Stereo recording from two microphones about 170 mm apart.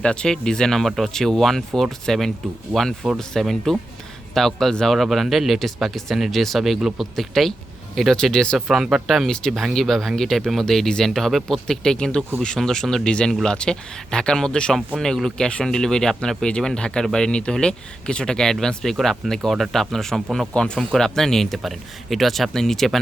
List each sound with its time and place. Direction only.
0.0 s speech: 5° left (ahead or behind)